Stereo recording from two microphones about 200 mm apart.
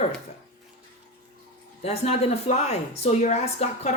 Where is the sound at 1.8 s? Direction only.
30° left (ahead or behind).